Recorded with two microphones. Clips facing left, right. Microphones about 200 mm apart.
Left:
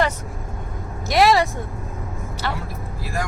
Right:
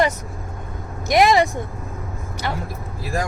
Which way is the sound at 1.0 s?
15° right (ahead or behind).